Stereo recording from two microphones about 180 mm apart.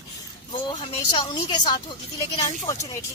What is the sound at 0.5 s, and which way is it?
A woman's voice, 30° left (ahead or behind).